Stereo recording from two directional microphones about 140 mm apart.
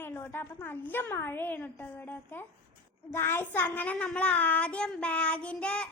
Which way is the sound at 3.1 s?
15° left (ahead or behind).